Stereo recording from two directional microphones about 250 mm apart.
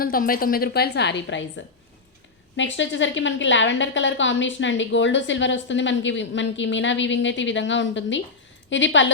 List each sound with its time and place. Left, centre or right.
0.0 s a woman's voice: left